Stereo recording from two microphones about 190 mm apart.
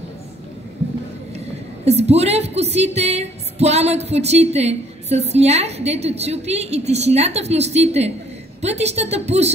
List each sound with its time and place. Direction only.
1.9 s a woman's voice: 35° right (ahead or behind)